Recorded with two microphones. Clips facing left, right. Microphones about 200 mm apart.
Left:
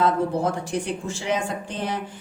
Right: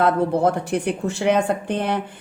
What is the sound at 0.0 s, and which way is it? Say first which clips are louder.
A woman's voice: right 4 dB; 60° right (ahead or behind).